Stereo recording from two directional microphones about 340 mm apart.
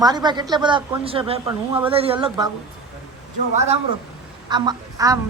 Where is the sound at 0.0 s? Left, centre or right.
Centre.